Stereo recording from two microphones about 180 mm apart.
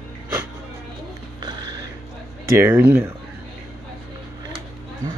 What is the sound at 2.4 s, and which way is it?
Speech, 15° right (ahead or behind).